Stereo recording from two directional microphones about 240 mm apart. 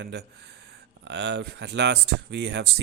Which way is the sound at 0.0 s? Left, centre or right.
Right.